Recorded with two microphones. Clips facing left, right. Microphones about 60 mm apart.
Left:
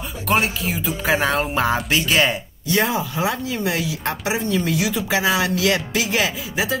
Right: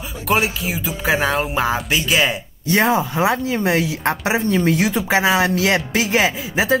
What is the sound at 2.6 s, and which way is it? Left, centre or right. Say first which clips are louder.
Speech: right 4 dB; right.